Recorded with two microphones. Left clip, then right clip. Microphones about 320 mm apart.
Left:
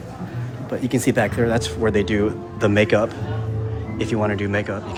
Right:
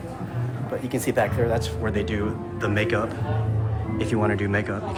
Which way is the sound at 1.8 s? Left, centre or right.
Centre.